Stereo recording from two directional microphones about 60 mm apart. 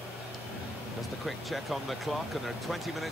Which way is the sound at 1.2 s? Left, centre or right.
Centre.